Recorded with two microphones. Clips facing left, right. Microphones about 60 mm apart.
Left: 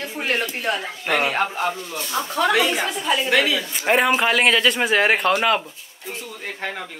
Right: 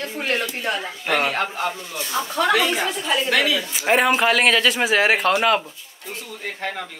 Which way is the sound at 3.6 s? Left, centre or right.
Centre.